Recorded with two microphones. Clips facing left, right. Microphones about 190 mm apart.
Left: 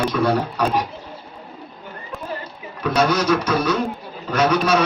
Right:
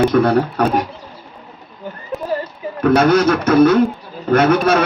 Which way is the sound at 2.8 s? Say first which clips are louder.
Right 6 dB; 55° right (ahead or behind).